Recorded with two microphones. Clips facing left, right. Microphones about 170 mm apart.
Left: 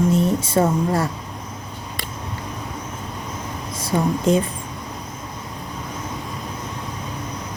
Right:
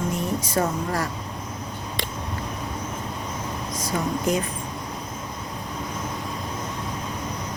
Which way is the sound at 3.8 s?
30° left (ahead or behind).